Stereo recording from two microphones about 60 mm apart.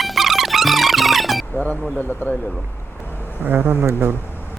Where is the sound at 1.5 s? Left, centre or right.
Left.